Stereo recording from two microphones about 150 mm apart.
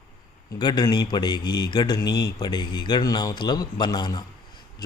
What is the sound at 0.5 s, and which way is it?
A man's voice, 25° left (ahead or behind).